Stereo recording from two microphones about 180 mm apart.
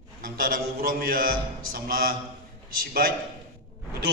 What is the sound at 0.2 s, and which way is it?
A man's voice, 50° right (ahead or behind).